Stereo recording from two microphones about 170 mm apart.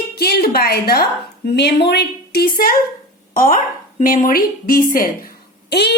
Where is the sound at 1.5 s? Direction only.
80° left; by 5.3 s 55° left (ahead or behind).